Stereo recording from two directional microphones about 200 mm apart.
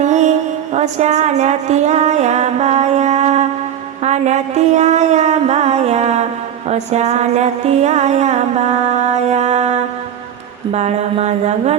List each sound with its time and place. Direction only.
0.0 s mantra: 35° right (ahead or behind)
0.7 s music: 35° right (ahead or behind)